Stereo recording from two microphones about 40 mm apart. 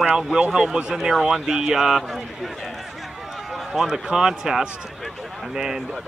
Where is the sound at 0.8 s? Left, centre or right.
Right.